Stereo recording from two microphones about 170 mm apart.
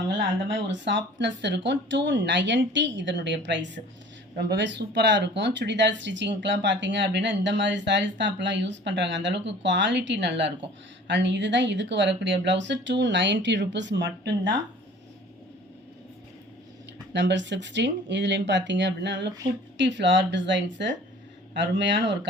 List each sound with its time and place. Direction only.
0.2 s speech: 90° right
17.1 s speech: 90° right